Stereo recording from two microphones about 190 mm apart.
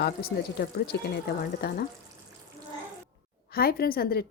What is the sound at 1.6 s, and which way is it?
Speech, 55° left (ahead or behind).